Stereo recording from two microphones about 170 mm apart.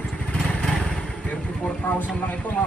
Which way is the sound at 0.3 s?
5° left (ahead or behind).